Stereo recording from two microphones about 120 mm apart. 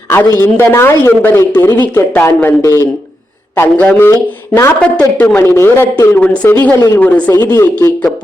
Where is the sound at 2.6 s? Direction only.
30° left (ahead or behind).